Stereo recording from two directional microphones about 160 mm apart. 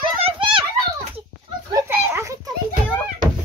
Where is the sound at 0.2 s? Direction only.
30° right (ahead or behind).